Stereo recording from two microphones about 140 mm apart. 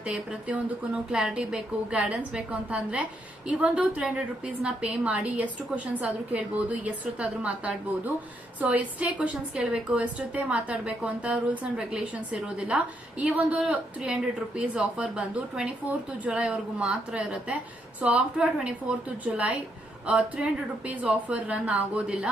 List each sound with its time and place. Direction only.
0.0 s a woman's voice: 5° right (ahead or behind)